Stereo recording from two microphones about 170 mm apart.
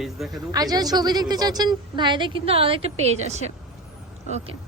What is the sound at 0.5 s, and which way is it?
Speech, 20° right (ahead or behind).